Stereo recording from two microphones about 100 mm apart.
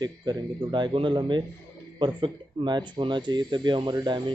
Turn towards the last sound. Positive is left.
turn(degrees=-45)  # may be behind; listen again after turning